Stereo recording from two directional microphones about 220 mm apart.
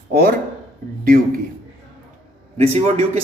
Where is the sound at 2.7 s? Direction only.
30° right (ahead or behind).